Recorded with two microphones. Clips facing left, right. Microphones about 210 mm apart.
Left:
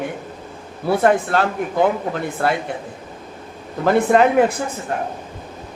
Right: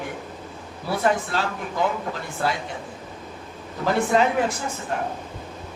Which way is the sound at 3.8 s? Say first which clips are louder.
Left 6 dB; 55° left (ahead or behind).